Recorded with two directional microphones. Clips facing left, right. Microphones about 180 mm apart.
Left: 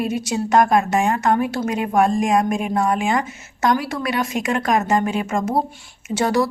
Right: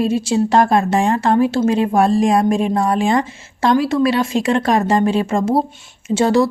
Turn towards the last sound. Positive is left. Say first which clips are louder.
# right 5 dB
turn(degrees=-25)  # may be behind; listen again after turning